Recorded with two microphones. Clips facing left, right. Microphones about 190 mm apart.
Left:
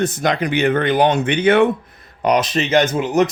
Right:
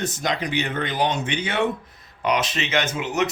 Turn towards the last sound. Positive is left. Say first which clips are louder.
# left 8 dB
turn(degrees=40)  # may be behind; listen again after turning